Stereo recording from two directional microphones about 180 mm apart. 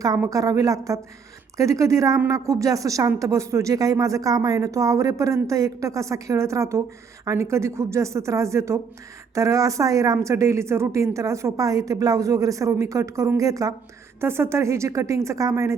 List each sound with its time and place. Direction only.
0.3 s a woman's voice: 20° right (ahead or behind)